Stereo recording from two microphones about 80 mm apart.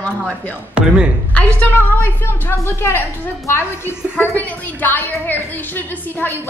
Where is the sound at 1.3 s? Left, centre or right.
Left.